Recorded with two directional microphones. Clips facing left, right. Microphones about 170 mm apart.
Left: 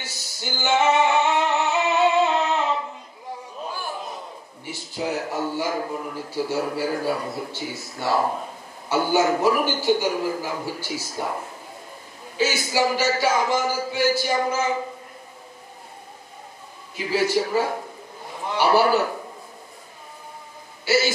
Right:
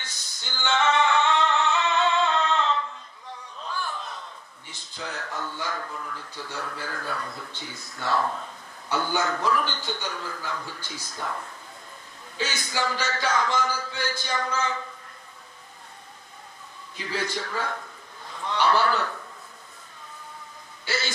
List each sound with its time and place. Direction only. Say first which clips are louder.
0.0 s music: left 8 dB; 5° left (ahead or behind)
0.5 s music: left 4 dB; 20° left (ahead or behind)
3.6 s a sound: left 1 dB; 15° left (ahead or behind)
3.9 s a sound: left 4 dB; 25° left (ahead or behind)
4.9 s speech: left 8 dB; 20° left (ahead or behind)
16.9 s a man's voice: left 8 dB; 15° left (ahead or behind)
17.2 s a man's voice: left 10 dB; 25° left (ahead or behind)